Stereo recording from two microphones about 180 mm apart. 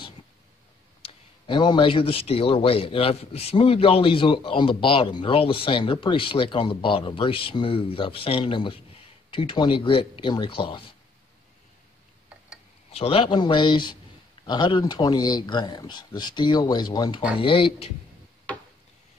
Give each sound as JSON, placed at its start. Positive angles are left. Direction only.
{"t": 1.0, "sound": "a man's voice", "side_deg": 25}
{"t": 12.9, "sound": "a man's voice", "side_deg": 30}